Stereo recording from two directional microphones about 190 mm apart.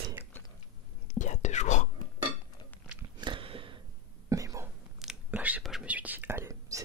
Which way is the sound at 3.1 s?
25° right (ahead or behind).